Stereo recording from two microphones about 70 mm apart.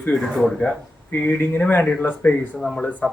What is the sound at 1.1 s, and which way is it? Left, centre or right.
Speech, left.